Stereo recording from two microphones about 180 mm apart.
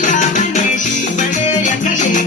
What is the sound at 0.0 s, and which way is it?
Music, 45° left (ahead or behind).